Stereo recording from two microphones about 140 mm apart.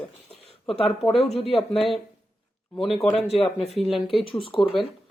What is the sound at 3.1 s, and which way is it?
Speech, 45° left (ahead or behind).